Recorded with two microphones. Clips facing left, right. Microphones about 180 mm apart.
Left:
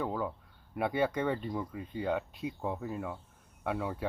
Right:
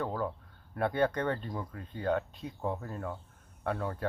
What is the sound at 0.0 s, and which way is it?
Speech, 5° left (ahead or behind).